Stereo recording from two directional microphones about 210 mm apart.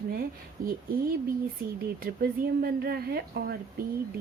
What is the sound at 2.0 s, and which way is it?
Speech, 45° right (ahead or behind).